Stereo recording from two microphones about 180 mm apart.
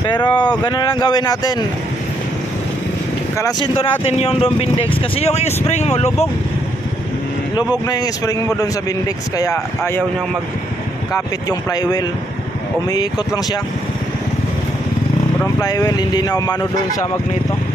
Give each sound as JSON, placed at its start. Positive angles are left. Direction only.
{"t": 0.0, "sound": "speech", "side_deg": 25}
{"t": 3.3, "sound": "speech", "side_deg": 20}
{"t": 7.9, "sound": "speech", "side_deg": 20}
{"t": 11.4, "sound": "speech", "side_deg": 20}
{"t": 15.6, "sound": "speech", "side_deg": 20}